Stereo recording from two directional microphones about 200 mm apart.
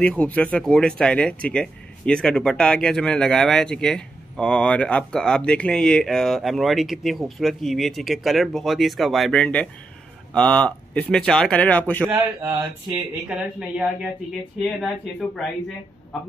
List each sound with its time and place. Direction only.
0.0 s speech: 5° left (ahead or behind)
12.1 s speech: 15° right (ahead or behind)
13.6 s speech: 5° right (ahead or behind)